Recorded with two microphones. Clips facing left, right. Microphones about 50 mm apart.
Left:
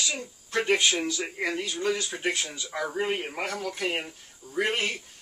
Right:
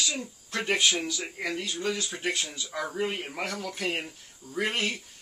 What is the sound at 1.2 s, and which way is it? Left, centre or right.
Speech, centre.